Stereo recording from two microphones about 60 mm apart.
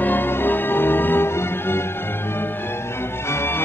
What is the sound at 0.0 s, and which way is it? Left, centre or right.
Music, left.